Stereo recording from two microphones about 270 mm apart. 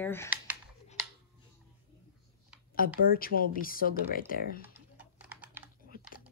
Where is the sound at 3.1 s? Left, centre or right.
Left.